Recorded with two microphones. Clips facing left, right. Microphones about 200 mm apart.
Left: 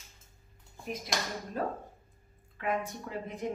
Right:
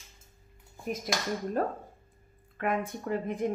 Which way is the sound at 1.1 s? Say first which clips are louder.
Right 6 dB; 50° right (ahead or behind).